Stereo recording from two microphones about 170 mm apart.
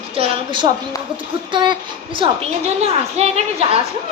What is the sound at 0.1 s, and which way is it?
A woman's voice, 30° right (ahead or behind).